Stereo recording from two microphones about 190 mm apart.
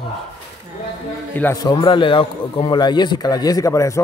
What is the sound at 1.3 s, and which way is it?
A man's voice, 15° left (ahead or behind).